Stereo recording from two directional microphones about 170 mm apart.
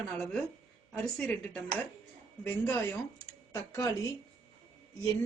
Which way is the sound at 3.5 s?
20° left (ahead or behind).